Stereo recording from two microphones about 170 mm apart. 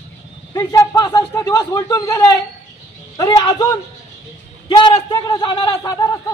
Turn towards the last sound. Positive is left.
turn(degrees=20)  # may be behind; listen again after turning